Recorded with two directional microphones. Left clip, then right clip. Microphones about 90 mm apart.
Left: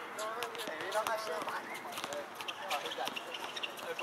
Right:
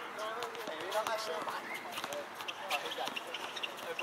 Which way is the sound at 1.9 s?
5° right (ahead or behind).